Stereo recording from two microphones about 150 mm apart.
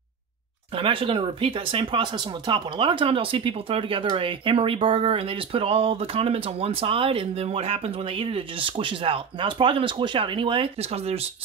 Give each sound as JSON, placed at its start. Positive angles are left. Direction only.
{"t": 0.7, "sound": "speech", "side_deg": -35}